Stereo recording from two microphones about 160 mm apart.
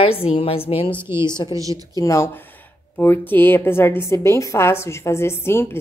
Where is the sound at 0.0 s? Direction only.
35° left (ahead or behind).